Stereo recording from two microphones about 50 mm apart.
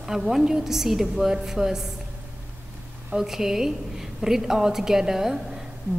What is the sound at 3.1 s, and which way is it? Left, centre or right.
A woman's voice, centre.